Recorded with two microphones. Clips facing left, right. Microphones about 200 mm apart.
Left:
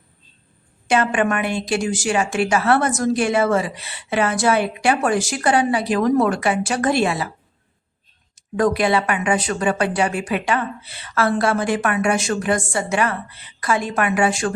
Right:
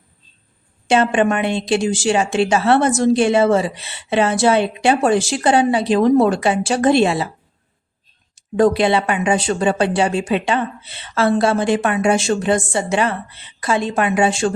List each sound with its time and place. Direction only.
0.9 s a woman's voice: 25° right (ahead or behind)
8.5 s a woman's voice: 25° right (ahead or behind)